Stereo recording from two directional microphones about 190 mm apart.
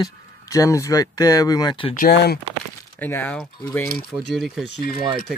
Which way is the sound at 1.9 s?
55° left (ahead or behind).